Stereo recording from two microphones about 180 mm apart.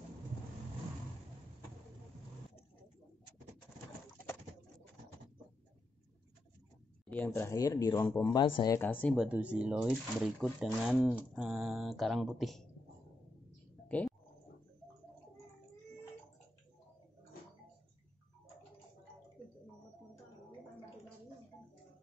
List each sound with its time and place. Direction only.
7.2 s speech: 15° left (ahead or behind)
8.7 s speech: 10° left (ahead or behind)
9.1 s speech: 5° right (ahead or behind)
13.8 s a sound: 10° left (ahead or behind)